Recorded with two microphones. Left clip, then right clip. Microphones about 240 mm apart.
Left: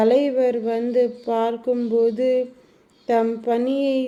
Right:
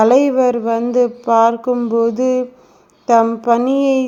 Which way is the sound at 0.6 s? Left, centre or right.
Right.